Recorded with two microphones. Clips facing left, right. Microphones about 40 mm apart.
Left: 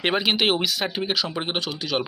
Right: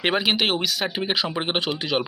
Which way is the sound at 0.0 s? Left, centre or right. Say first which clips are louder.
Even; centre.